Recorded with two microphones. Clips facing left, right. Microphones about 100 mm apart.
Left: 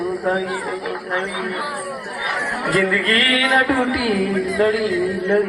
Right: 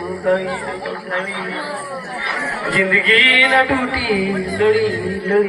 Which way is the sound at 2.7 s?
30° left (ahead or behind).